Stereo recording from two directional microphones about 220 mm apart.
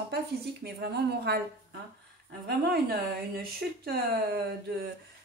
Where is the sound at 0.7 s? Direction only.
50° right (ahead or behind).